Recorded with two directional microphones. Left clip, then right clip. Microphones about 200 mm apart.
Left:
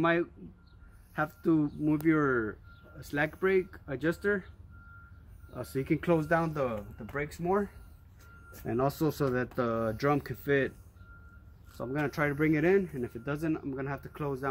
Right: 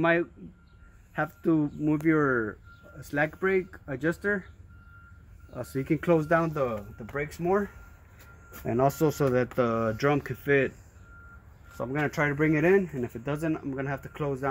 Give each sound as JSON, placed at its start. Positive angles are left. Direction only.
{"t": 0.0, "sound": "speech", "side_deg": -20}
{"t": 1.1, "sound": "speech", "side_deg": -35}
{"t": 5.5, "sound": "speech", "side_deg": -60}
{"t": 7.2, "sound": "speech", "side_deg": -30}
{"t": 8.6, "sound": "speech", "side_deg": -45}
{"t": 9.5, "sound": "speech", "side_deg": -25}
{"t": 12.0, "sound": "speech", "side_deg": -45}